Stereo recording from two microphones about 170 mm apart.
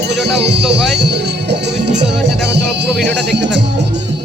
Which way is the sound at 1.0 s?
80° right.